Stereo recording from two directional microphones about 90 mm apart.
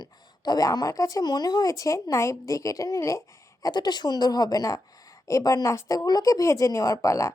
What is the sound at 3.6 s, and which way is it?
Speech, 50° left (ahead or behind).